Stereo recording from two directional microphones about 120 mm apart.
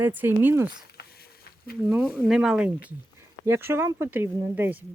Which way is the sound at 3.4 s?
20° right (ahead or behind).